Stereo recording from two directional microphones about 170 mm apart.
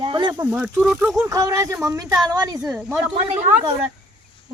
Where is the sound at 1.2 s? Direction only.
20° right (ahead or behind).